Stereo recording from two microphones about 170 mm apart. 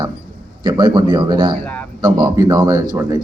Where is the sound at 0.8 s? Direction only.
30° right (ahead or behind).